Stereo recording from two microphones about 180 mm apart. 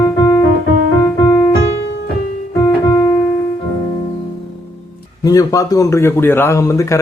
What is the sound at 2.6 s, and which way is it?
Keyboard, 20° left (ahead or behind).